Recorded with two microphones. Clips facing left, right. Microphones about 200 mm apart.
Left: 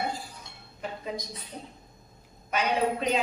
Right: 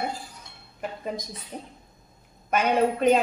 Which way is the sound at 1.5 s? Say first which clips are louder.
Right 4 dB; 50° right (ahead or behind).